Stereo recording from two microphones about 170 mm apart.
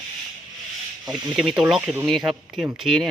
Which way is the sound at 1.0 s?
Centre (ahead or behind).